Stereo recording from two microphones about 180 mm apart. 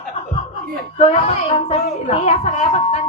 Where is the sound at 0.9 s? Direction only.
40° left (ahead or behind).